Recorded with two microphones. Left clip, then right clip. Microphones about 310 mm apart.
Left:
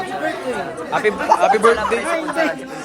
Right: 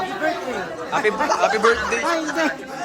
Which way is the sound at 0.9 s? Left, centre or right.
Centre.